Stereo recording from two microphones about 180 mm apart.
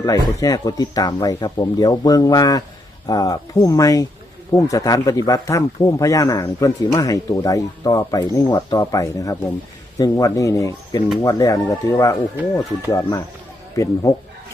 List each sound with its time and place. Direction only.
0.0 s a man's voice: 20° left (ahead or behind)